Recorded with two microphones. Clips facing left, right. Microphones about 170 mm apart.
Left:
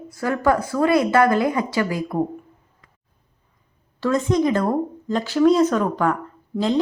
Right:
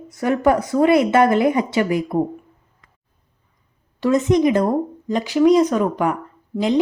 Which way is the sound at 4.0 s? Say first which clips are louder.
Right 3 dB; 20° right (ahead or behind).